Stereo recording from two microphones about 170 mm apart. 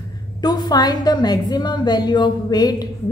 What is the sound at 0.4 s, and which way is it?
A woman's voice, 25° left (ahead or behind).